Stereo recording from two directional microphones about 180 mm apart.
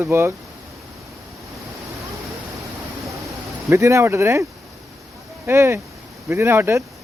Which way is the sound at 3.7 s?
15° right (ahead or behind).